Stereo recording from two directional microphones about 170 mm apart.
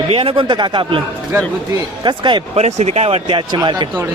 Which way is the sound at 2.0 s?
25° right (ahead or behind).